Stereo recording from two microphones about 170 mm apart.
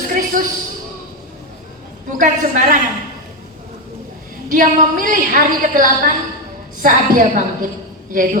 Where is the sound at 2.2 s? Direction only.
55° right (ahead or behind).